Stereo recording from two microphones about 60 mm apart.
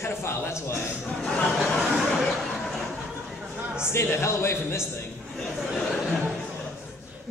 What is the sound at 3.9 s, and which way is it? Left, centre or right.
Speech, left.